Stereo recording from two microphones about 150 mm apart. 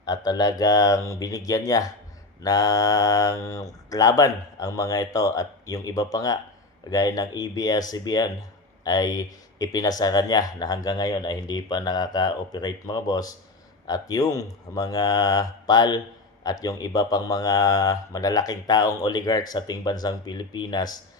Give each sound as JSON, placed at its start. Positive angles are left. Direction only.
{"t": 0.0, "sound": "speech", "side_deg": 25}